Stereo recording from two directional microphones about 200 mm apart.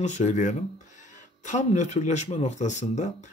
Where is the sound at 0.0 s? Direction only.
35° left (ahead or behind).